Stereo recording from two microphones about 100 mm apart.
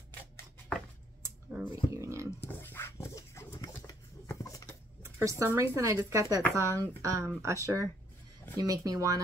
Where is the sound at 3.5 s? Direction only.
40° left (ahead or behind).